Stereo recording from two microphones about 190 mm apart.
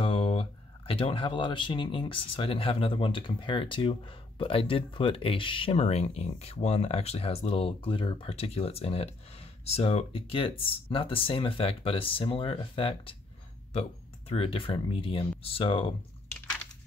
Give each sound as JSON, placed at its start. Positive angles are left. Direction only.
{"t": 0.0, "sound": "speech", "side_deg": 30}